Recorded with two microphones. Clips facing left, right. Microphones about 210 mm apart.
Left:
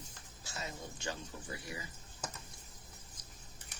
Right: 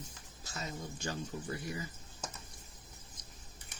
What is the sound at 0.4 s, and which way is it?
Speech, 40° right (ahead or behind).